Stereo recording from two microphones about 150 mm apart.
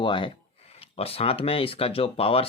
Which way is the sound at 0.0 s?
30° left (ahead or behind).